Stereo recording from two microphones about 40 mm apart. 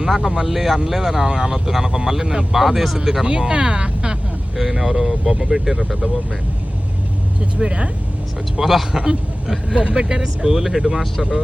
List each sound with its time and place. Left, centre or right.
0.1 s speech: centre
3.2 s speech: right
4.5 s speech: centre
7.6 s speech: right
8.5 s speech: centre
9.7 s speech: right
10.4 s speech: centre